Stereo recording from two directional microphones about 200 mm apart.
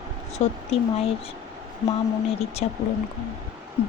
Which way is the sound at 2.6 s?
35° left (ahead or behind).